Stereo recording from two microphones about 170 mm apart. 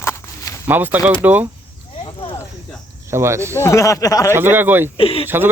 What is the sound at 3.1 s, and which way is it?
Speech, 15° right (ahead or behind).